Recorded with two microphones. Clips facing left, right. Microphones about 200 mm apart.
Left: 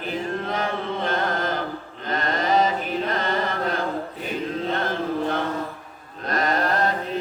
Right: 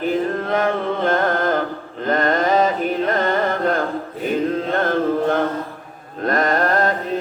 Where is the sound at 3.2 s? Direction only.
50° right (ahead or behind).